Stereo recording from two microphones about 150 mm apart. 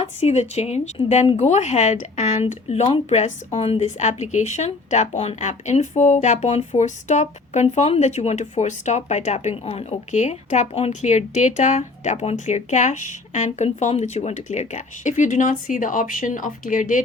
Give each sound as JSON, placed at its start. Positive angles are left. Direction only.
{"t": 0.0, "sound": "speech", "side_deg": 45}